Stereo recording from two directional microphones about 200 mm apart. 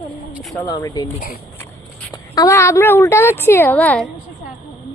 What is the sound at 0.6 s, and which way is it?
Speech, 15° left (ahead or behind).